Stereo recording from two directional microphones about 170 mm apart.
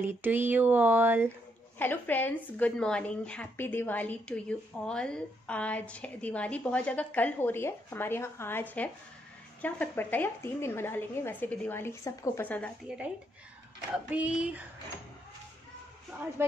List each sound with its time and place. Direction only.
0.0 s speech: 10° right (ahead or behind)
1.8 s speech: 10° left (ahead or behind)
13.9 s speech: 5° right (ahead or behind)
16.4 s speech: 15° right (ahead or behind)